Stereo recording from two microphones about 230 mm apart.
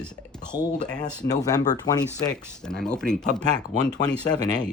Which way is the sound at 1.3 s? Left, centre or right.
Centre.